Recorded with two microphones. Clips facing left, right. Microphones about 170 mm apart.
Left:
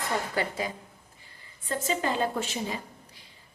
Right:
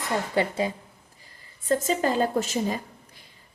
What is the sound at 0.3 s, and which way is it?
Speech, 25° right (ahead or behind).